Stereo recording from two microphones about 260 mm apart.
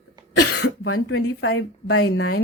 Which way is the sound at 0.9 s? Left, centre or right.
Left.